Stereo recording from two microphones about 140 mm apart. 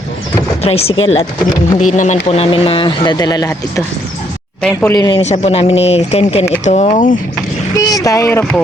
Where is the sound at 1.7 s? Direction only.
55° left (ahead or behind); by 3.5 s 30° left (ahead or behind).